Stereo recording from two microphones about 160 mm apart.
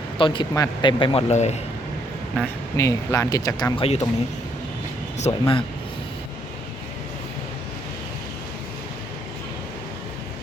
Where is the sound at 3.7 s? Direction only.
40° left (ahead or behind).